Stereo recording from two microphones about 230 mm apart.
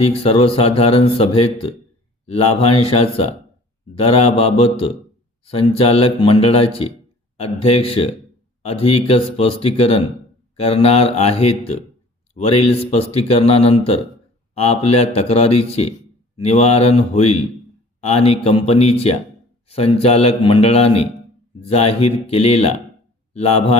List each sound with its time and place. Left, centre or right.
0.0 s speech: left